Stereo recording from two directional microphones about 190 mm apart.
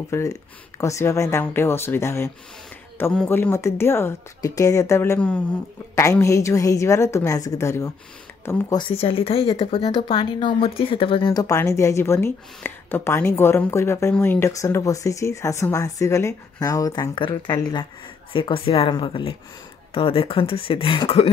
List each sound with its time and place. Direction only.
0.1 s speech: 15° left (ahead or behind)